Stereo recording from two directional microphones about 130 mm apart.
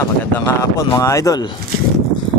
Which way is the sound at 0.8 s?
25° left (ahead or behind).